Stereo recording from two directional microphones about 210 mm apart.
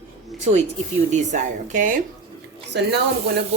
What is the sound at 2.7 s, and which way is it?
Speech, 50° right (ahead or behind).